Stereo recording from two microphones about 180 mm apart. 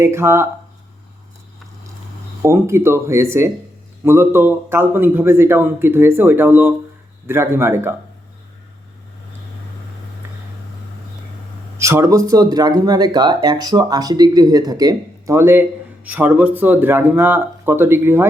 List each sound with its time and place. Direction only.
0.0 s a man's voice: 15° right (ahead or behind)
2.4 s a man's voice: 15° right (ahead or behind)
10.2 s a sound: 10° right (ahead or behind)
11.8 s a man's voice: 15° right (ahead or behind)